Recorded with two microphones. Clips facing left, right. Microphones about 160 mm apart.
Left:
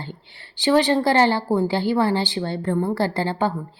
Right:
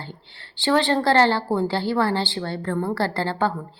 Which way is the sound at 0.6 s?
15° left (ahead or behind).